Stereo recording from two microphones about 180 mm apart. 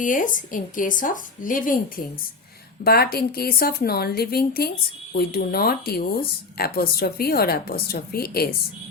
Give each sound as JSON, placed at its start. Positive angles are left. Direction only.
{"t": 0.0, "sound": "speech", "side_deg": 45}